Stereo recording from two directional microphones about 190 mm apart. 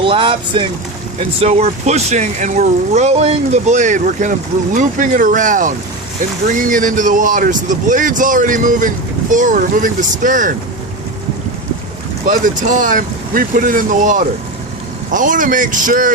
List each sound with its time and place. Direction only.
0.0 s speech: 30° right (ahead or behind)
12.2 s speech: 45° right (ahead or behind)